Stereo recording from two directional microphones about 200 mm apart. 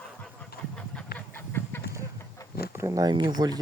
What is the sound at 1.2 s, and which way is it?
Duck, 10° left (ahead or behind).